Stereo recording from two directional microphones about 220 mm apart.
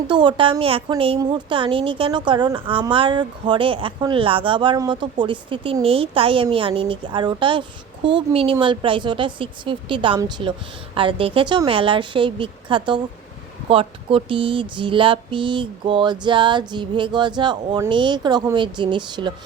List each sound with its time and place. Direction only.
0.1 s a woman's voice: 20° right (ahead or behind)